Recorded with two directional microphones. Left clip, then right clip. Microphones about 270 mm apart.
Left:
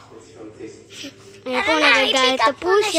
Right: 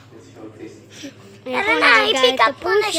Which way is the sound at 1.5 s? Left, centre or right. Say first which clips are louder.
Right 2 dB; right.